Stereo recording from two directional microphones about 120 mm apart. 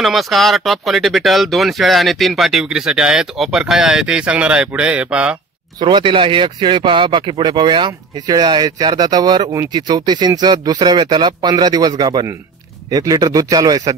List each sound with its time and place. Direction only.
0.0 s speech: centre (ahead or behind)
5.8 s speech: 40° right (ahead or behind)